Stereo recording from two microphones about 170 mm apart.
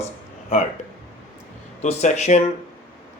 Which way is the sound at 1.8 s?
45° left (ahead or behind).